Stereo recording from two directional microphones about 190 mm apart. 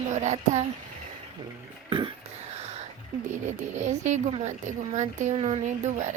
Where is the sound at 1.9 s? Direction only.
25° right (ahead or behind).